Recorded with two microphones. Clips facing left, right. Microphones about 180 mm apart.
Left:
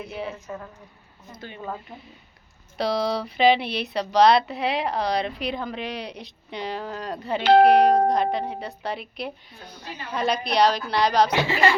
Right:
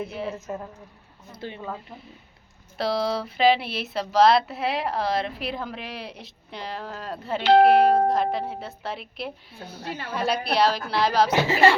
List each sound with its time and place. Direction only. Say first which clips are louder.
0.0 s speech: right 2 dB; centre (ahead or behind)
0.4 s a woman's voice: right 3 dB; 20° right (ahead or behind)
2.7 s speech: left 1 dB; centre (ahead or behind)
9.8 s a woman's voice: right 4 dB; 50° right (ahead or behind)
10.1 s speech: left 1 dB; 5° right (ahead or behind)
11.3 s a woman's voice: right 1 dB; 40° right (ahead or behind)